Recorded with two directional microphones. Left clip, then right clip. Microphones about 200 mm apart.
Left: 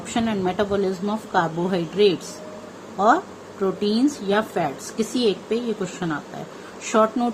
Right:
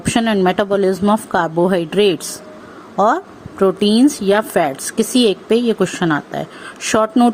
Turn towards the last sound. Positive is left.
turn(degrees=-45)  # may be behind; listen again after turning